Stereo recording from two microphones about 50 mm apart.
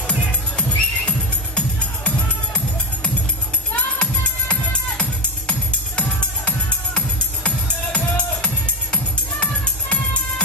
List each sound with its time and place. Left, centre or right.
0.6 s music: left
3.7 s music: left